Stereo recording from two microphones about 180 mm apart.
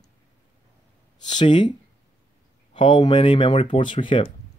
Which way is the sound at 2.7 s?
25° left (ahead or behind).